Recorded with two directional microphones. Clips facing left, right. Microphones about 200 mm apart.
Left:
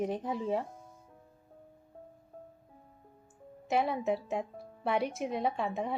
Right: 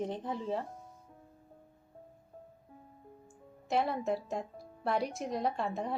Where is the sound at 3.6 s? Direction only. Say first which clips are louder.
Left 2 dB; 5° left (ahead or behind).